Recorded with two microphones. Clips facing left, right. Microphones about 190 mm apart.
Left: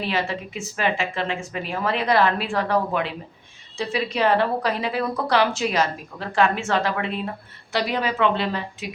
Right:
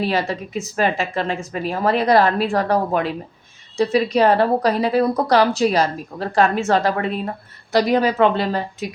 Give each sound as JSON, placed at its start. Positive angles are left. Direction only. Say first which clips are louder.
{"t": 0.0, "sound": "a woman's voice", "louder": "right 5 dB", "side_deg": -40}